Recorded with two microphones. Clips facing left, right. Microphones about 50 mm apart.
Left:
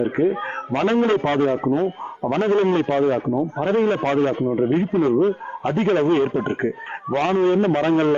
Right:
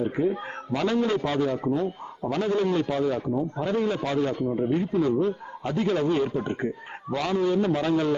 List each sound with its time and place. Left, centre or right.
0.0 s a man's voice: left